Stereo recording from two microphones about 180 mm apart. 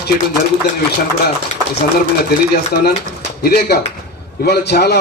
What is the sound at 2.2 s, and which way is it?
A man's voice, 60° left (ahead or behind).